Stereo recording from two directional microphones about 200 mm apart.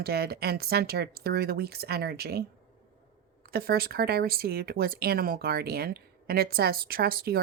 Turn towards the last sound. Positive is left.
turn(degrees=-50)  # may be behind; listen again after turning